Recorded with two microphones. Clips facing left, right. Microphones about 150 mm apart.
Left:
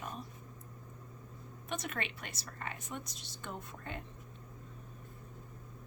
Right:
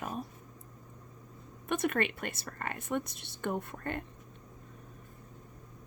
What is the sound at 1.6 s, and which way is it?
Speech, 55° right (ahead or behind).